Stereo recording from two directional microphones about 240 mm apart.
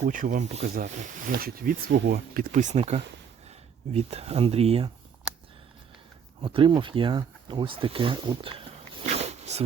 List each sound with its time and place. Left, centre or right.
0.0 s speech: right
1.3 s speech: right
6.4 s speech: right
9.1 s zipper: right